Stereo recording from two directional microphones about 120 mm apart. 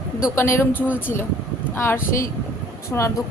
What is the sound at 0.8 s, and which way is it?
Speech, 10° right (ahead or behind).